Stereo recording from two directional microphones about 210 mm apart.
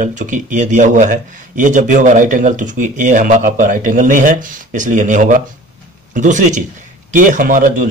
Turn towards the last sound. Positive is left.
turn(degrees=-40)  # may be behind; listen again after turning